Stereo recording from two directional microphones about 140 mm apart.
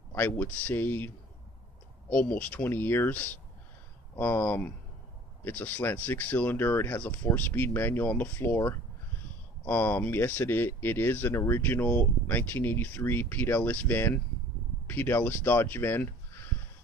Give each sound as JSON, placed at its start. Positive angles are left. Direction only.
{"t": 0.1, "sound": "speech", "side_deg": 15}
{"t": 2.1, "sound": "speech", "side_deg": 10}